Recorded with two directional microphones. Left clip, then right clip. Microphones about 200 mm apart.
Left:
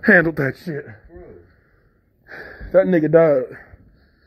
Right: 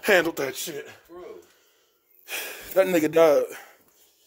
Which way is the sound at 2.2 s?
60° right (ahead or behind).